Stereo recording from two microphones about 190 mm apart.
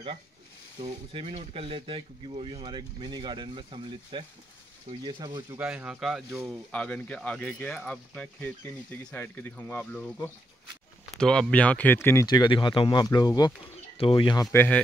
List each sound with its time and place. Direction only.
1.1 s speech: 30° right (ahead or behind); by 14.8 s 10° left (ahead or behind)